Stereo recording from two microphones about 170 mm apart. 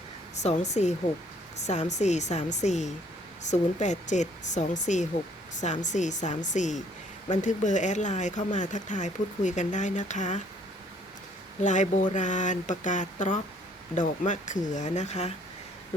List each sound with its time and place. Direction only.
0.3 s speech: 40° left (ahead or behind)
11.6 s speech: 45° left (ahead or behind)